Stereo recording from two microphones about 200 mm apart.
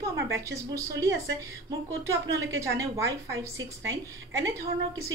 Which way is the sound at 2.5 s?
15° right (ahead or behind).